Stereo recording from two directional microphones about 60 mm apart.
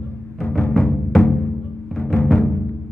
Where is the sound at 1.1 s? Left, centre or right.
Centre.